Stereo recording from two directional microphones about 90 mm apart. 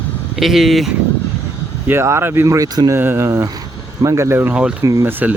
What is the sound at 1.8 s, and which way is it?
Speech, 30° right (ahead or behind).